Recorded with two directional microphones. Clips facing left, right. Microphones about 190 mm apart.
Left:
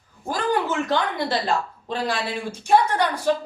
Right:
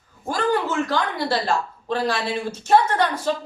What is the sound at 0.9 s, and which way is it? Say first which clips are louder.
A woman's voice: even; 20° left (ahead or behind).